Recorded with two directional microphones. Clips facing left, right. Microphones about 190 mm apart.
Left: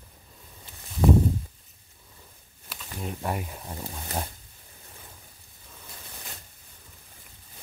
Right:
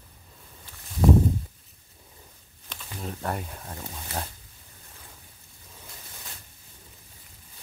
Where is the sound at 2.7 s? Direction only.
10° left (ahead or behind).